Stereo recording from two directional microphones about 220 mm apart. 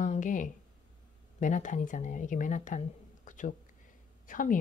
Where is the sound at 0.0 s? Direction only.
35° left (ahead or behind).